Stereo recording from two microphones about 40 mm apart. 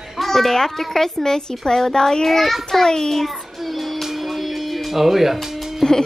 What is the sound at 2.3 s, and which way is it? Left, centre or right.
Speech, centre.